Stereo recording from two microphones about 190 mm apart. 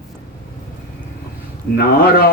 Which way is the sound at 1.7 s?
55° left (ahead or behind).